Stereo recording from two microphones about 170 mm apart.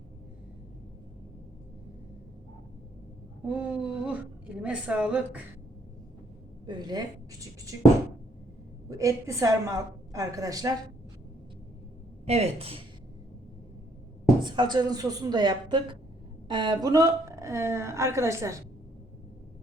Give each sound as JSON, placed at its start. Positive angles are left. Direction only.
{"t": 3.4, "sound": "a sound", "side_deg": -5}
{"t": 6.7, "sound": "a woman's voice", "side_deg": -25}
{"t": 8.9, "sound": "a woman's voice", "side_deg": -20}
{"t": 12.2, "sound": "speech", "side_deg": -40}
{"t": 14.4, "sound": "a woman's voice", "side_deg": -25}